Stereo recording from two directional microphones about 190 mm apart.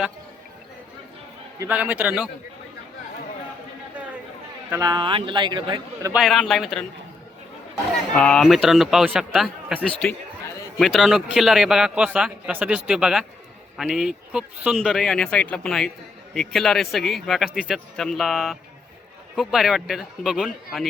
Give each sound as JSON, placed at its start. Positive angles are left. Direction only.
{"t": 1.5, "sound": "a man's voice", "side_deg": -10}
{"t": 4.7, "sound": "a man's voice", "side_deg": -20}
{"t": 6.1, "sound": "a man's voice", "side_deg": 0}
{"t": 8.1, "sound": "a man's voice", "side_deg": 5}